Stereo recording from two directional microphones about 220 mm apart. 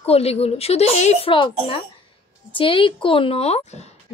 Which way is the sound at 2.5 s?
25° left (ahead or behind).